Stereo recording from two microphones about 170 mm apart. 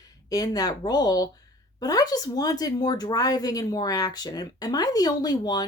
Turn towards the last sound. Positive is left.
turn(degrees=25)  # may be behind; listen again after turning